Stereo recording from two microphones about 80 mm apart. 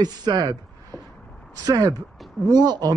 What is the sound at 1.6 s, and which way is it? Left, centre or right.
A man's voice, right.